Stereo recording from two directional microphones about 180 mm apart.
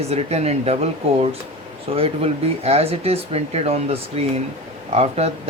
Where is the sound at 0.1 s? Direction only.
35° right (ahead or behind).